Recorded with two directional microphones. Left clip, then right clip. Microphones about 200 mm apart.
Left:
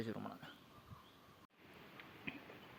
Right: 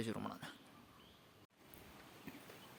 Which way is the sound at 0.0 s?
30° right (ahead or behind).